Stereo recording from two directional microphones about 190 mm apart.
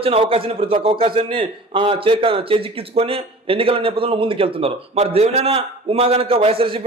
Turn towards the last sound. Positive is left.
turn(degrees=-30)  # may be behind; listen again after turning